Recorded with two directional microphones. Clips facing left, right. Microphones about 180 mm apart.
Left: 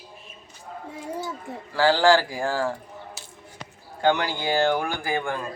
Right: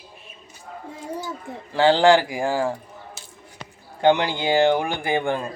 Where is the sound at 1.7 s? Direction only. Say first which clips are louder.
Right 3 dB; 20° right (ahead or behind).